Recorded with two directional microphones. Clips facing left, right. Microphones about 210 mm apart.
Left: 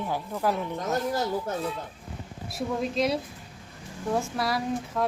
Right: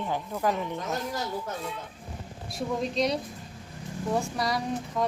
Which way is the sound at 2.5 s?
5° left (ahead or behind).